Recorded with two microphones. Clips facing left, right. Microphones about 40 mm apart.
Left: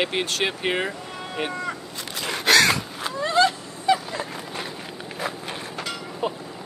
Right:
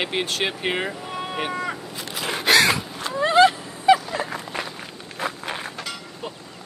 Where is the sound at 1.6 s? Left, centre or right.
Centre.